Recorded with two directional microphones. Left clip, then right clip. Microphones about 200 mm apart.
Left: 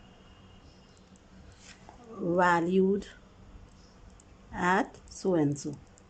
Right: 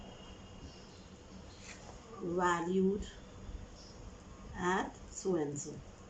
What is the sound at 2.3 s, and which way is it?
Speech, 55° left (ahead or behind).